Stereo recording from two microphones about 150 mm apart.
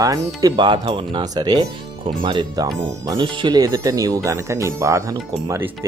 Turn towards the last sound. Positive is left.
turn(degrees=-20)  # may be behind; listen again after turning